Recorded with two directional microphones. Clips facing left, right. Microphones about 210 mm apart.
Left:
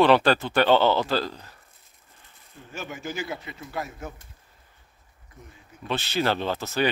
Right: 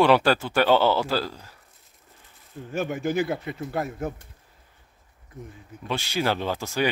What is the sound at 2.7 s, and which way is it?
Speech, 55° right (ahead or behind).